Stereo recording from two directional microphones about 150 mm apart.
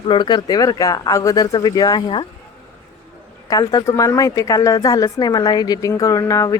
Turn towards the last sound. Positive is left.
turn(degrees=20)  # may be behind; listen again after turning